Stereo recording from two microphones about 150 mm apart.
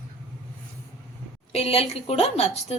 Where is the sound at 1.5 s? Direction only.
40° left (ahead or behind).